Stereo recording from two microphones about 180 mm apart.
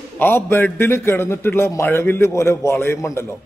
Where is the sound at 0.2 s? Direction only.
10° left (ahead or behind).